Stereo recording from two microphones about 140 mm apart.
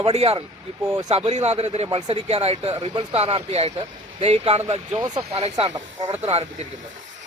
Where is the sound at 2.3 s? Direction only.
50° right (ahead or behind).